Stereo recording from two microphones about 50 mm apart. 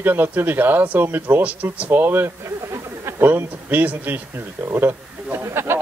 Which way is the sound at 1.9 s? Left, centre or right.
Right.